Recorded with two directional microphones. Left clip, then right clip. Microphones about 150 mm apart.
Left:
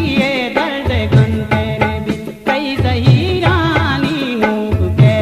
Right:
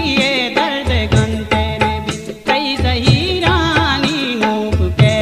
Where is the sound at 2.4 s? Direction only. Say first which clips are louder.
Right 1 dB; 40° left (ahead or behind).